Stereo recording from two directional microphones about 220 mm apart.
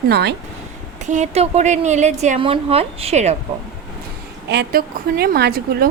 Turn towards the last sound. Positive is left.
turn(degrees=-45)  # may be behind; listen again after turning